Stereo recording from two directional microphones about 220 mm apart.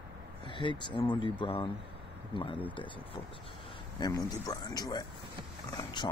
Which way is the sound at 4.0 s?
15° left (ahead or behind).